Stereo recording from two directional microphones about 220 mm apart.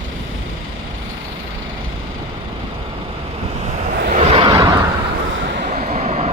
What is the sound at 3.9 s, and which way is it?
Vehicle, 40° right (ahead or behind).